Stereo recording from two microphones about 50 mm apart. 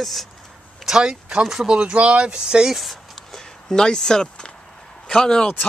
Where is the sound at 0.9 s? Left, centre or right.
Centre.